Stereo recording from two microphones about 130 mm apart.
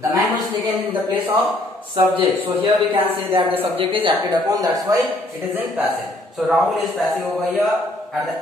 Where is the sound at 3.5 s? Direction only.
45° right (ahead or behind).